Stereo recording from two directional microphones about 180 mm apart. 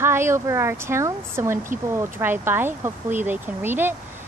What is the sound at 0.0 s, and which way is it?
Speech, 15° right (ahead or behind).